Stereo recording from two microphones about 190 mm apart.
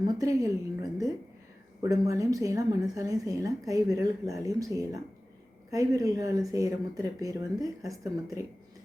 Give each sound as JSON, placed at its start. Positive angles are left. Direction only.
{"t": 0.0, "sound": "speech", "side_deg": -20}